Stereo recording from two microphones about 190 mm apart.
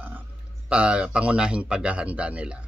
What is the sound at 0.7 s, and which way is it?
A man's voice, 5° right (ahead or behind).